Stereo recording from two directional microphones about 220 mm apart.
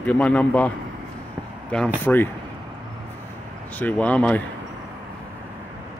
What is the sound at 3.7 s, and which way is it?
Speech, 5° left (ahead or behind).